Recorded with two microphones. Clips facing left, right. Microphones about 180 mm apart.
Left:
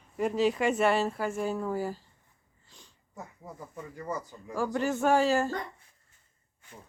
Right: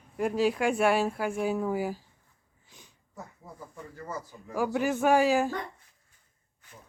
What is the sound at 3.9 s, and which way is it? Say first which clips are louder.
Speech: left 3 dB; 15° left (ahead or behind).